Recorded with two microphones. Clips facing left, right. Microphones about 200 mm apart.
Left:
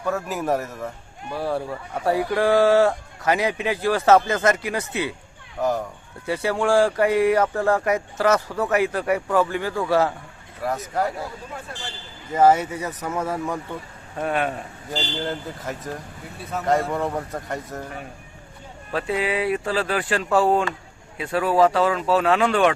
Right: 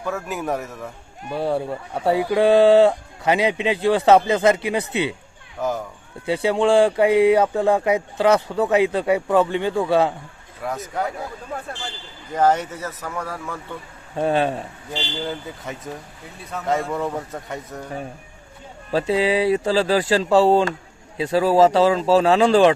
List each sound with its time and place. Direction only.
0.0 s speech: centre (ahead or behind)
1.3 s speech: 25° right (ahead or behind)
5.5 s a sound: centre (ahead or behind)
6.2 s speech: 20° right (ahead or behind)
10.6 s speech: centre (ahead or behind)
12.3 s speech: 10° left (ahead or behind)
13.0 s speech: 20° left (ahead or behind)
14.2 s speech: 30° right (ahead or behind)
14.9 s speech: centre (ahead or behind)
18.9 s speech: 30° right (ahead or behind)